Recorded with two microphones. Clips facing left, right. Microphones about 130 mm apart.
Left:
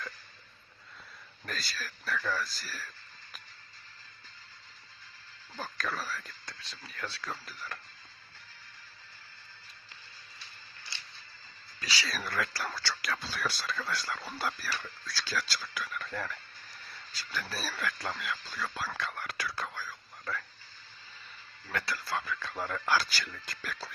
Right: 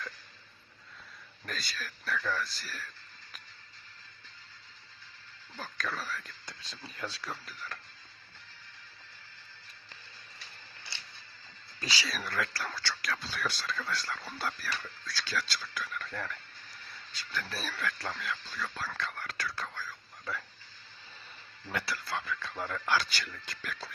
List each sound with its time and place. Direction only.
1.5 s speech: centre (ahead or behind)
5.5 s speech: 5° left (ahead or behind)
6.4 s speech: 15° right (ahead or behind)
7.3 s speech: centre (ahead or behind)
11.8 s speech: 20° right (ahead or behind)
12.0 s speech: centre (ahead or behind)
21.8 s speech: centre (ahead or behind)